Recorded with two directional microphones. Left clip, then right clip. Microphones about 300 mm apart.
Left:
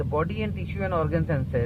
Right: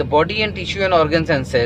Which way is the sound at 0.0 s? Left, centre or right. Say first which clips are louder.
Right 12 dB; centre.